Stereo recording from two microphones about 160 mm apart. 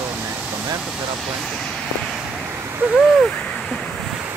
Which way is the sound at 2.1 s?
10° right (ahead or behind).